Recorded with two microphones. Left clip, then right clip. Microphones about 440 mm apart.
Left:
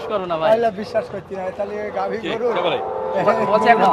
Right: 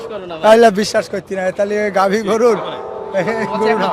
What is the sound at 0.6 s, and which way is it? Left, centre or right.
Speech, right.